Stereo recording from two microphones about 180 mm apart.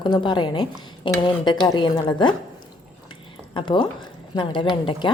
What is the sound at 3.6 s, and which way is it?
A woman's voice, 25° left (ahead or behind).